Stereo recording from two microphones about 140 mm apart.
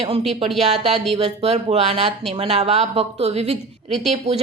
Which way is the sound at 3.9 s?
Centre (ahead or behind).